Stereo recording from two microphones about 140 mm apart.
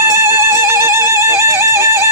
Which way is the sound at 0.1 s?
20° right (ahead or behind).